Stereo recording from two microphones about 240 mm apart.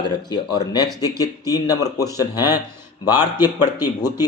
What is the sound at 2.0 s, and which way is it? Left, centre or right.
Speech, centre.